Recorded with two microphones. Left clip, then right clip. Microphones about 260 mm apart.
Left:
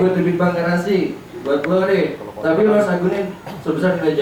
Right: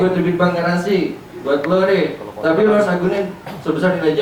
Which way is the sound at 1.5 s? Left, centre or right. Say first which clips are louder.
Right 1 dB; centre.